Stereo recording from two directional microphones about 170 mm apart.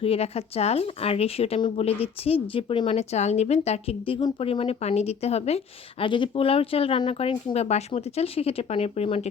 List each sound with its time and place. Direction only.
0.0 s a woman's voice: 35° left (ahead or behind)